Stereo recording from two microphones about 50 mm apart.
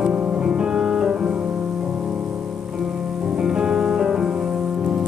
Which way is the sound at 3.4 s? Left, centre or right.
Centre.